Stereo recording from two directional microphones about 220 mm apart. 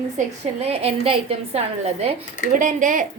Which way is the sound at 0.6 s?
25° right (ahead or behind).